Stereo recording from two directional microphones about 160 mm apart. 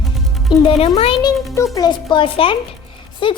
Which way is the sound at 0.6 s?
40° left (ahead or behind).